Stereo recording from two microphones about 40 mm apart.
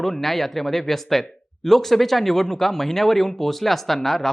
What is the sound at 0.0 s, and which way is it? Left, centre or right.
Speech, centre.